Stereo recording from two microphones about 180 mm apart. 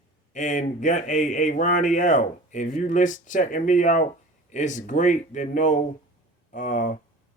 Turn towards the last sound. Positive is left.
turn(degrees=45)  # may be behind; listen again after turning